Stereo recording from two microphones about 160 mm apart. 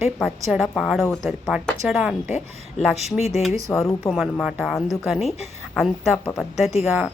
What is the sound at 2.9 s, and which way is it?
Speech, 40° left (ahead or behind).